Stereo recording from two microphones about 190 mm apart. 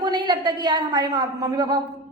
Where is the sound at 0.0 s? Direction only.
25° right (ahead or behind).